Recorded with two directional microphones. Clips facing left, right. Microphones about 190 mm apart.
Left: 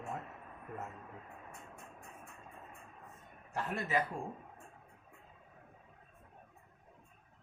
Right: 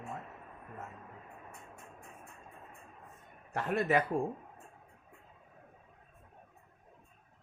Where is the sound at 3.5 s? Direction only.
65° right (ahead or behind).